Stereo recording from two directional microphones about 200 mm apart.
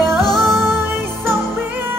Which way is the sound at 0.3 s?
Centre (ahead or behind).